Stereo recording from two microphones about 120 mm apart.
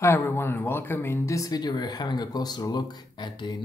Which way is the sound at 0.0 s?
20° left (ahead or behind).